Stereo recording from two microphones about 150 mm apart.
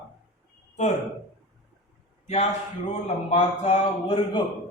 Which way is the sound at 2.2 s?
45° left (ahead or behind).